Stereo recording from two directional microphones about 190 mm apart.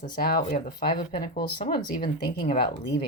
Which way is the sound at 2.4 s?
25° left (ahead or behind).